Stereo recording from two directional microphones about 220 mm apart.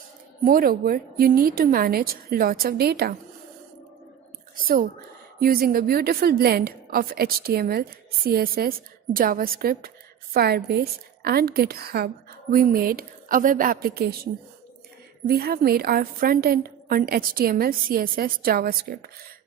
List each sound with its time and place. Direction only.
0.4 s a woman's voice: 40° right (ahead or behind)
4.6 s a woman's voice: 40° right (ahead or behind)
15.3 s a woman's voice: 45° right (ahead or behind)